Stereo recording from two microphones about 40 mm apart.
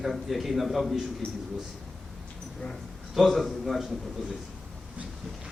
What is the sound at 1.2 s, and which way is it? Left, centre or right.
Speech, left.